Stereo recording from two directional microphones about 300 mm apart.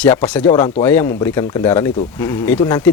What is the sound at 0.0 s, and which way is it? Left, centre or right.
Speech, centre.